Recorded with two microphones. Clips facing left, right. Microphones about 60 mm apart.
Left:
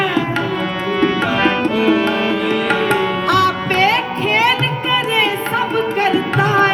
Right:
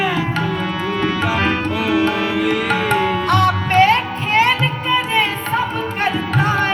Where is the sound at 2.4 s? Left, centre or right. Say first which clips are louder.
Left 1 dB; centre.